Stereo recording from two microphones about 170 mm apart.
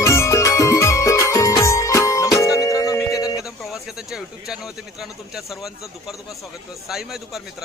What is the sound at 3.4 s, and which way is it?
Speech, centre (ahead or behind).